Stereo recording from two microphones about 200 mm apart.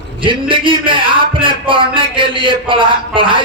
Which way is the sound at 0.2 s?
25° right (ahead or behind).